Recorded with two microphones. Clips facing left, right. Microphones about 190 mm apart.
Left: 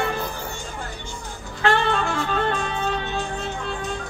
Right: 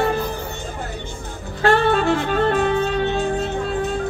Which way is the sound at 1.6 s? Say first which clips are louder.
Right 5 dB; 35° right (ahead or behind).